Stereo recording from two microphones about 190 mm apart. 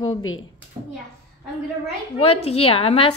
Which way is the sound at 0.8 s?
25° right (ahead or behind).